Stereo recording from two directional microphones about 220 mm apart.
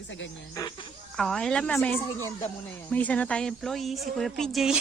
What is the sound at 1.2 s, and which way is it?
A woman's voice, centre (ahead or behind).